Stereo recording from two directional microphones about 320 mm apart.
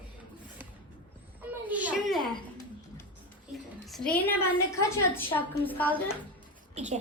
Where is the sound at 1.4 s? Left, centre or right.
Centre.